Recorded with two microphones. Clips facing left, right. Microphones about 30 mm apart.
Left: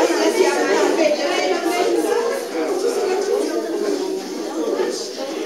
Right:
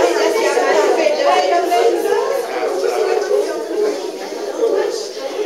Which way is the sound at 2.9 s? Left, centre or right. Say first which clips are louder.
Right 4 dB; right.